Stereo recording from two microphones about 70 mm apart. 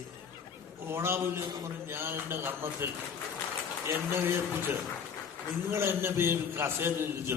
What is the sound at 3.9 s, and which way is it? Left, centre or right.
A man's voice, right.